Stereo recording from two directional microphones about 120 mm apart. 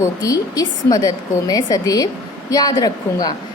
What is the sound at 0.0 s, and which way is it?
A woman's voice, 30° left (ahead or behind).